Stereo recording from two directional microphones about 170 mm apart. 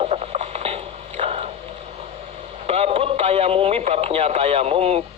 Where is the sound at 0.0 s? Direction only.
40° right (ahead or behind).